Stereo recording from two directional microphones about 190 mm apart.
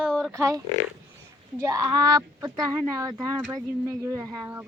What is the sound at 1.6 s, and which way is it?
A woman's voice, 15° right (ahead or behind).